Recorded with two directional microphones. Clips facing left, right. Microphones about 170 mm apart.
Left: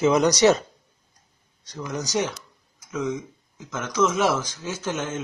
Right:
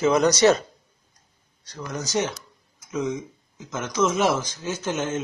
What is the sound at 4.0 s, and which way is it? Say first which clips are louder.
Speech: even; 10° right (ahead or behind).